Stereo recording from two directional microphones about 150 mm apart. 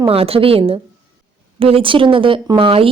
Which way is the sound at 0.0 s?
40° right (ahead or behind).